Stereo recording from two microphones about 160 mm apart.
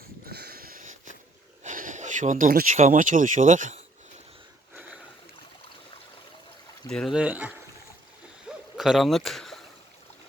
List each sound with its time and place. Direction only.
0.3 s a sound: 75° right (ahead or behind); by 0.9 s 60° right (ahead or behind)
1.6 s speech: 55° right (ahead or behind)
6.9 s speech: centre (ahead or behind)
8.4 s hoot: centre (ahead or behind)